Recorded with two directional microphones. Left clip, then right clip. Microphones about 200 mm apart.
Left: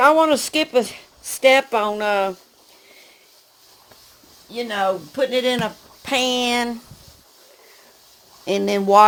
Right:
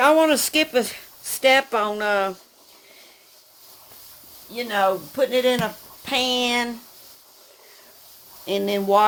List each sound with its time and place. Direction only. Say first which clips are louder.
0.0 s speech: left 2 dB; 5° left (ahead or behind); by 2.3 s 20° left (ahead or behind)
4.5 s speech: even; 35° left (ahead or behind)
8.4 s speech: left 3 dB; 40° left (ahead or behind)